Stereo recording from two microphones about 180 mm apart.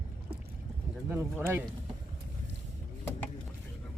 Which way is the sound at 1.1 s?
15° right (ahead or behind).